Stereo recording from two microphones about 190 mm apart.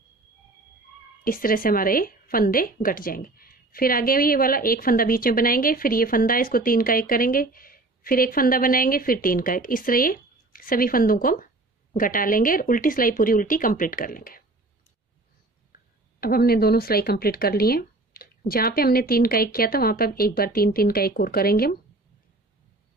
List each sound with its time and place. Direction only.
1.2 s a woman's voice: 50° left (ahead or behind)
16.2 s a woman's voice: 55° left (ahead or behind)